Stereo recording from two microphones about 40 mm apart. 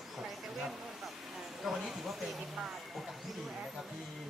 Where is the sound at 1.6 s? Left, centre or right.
Centre.